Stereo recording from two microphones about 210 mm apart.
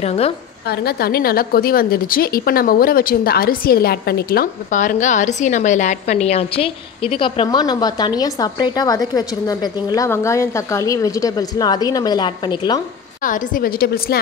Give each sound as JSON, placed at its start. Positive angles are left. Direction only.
{"t": 0.0, "sound": "a woman's voice", "side_deg": 30}
{"t": 0.7, "sound": "a woman's voice", "side_deg": 45}
{"t": 13.2, "sound": "a woman's voice", "side_deg": 40}